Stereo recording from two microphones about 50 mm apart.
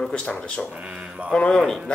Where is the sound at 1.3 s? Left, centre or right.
Centre.